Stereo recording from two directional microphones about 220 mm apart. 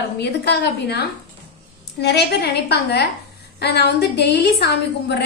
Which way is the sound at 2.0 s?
50° left (ahead or behind).